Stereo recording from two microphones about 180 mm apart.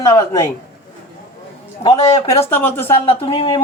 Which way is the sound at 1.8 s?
30° left (ahead or behind).